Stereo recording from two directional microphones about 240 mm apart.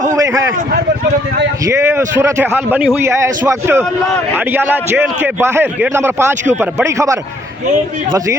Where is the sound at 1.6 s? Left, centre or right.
Centre.